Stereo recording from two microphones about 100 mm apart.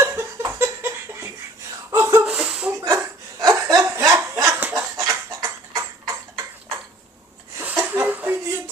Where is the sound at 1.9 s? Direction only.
25° right (ahead or behind).